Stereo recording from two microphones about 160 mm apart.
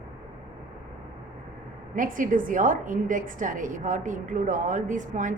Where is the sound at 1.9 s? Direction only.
55° right (ahead or behind).